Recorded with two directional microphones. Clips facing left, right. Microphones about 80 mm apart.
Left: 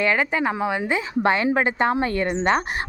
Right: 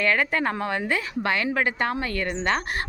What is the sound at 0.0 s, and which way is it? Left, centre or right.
A woman's voice, centre.